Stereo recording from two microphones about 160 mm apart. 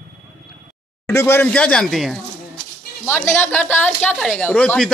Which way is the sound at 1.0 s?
15° left (ahead or behind).